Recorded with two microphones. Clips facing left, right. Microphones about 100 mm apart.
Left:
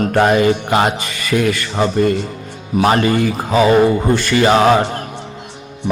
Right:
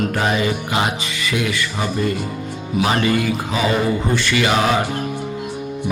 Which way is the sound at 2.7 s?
40° left (ahead or behind).